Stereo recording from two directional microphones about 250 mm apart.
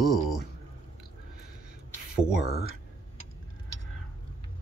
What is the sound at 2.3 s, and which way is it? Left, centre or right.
Speech, left.